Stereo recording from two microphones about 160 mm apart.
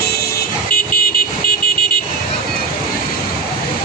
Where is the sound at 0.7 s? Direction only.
65° left (ahead or behind).